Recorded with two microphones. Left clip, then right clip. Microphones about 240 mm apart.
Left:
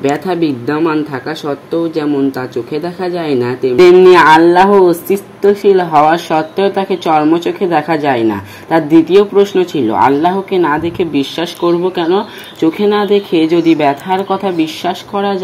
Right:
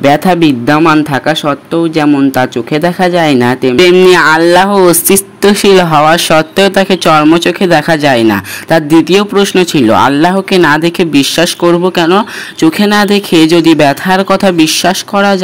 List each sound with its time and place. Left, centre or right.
0.1 s speech: right